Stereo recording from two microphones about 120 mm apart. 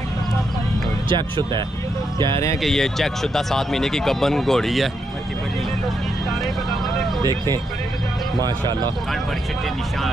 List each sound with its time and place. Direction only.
1.0 s speech: 40° right (ahead or behind)
2.6 s speech: centre (ahead or behind)
8.4 s speech: 35° right (ahead or behind)